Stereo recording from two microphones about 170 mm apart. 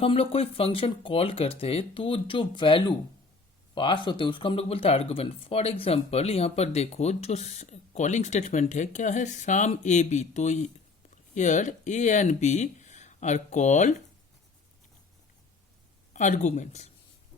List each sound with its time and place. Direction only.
0.0 s speech: 35° left (ahead or behind)
16.1 s speech: 45° left (ahead or behind)